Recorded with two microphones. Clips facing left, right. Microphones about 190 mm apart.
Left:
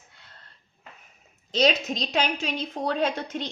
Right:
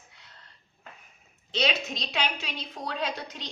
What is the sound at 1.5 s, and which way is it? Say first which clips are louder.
A woman's voice: left 6 dB; 40° left (ahead or behind).